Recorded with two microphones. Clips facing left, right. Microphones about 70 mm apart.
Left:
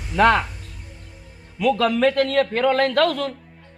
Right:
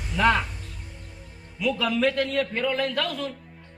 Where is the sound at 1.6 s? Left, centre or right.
Left.